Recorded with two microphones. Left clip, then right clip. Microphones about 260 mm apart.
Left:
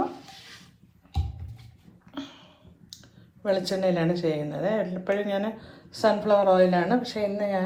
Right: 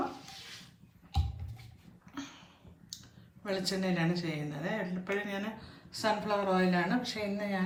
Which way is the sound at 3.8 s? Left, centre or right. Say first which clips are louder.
Left 9 dB; centre.